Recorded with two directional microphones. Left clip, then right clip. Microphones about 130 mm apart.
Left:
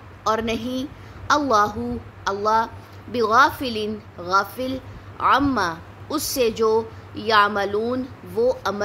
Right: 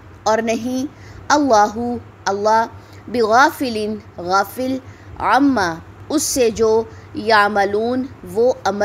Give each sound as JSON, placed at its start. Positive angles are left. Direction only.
{"t": 0.2, "sound": "a woman's voice", "side_deg": -40}